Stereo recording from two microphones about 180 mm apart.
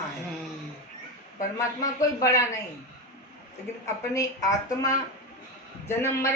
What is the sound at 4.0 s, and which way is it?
A woman's voice, 20° left (ahead or behind).